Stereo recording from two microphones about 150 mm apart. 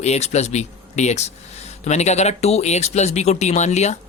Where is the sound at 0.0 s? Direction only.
45° left (ahead or behind).